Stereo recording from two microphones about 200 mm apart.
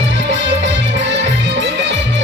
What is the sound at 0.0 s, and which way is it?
Music, 65° right (ahead or behind).